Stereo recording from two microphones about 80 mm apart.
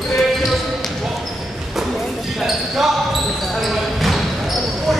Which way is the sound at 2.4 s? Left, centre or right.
Centre.